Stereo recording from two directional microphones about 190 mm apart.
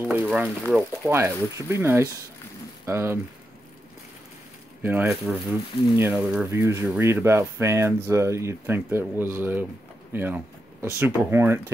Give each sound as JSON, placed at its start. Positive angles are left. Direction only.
{"t": 0.0, "sound": "speech", "side_deg": -10}
{"t": 4.8, "sound": "speech", "side_deg": -10}
{"t": 10.1, "sound": "a sound", "side_deg": -10}
{"t": 11.0, "sound": "speech", "side_deg": -10}